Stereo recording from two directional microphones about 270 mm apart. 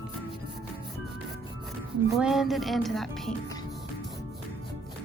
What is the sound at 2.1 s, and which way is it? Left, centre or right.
Speech, centre.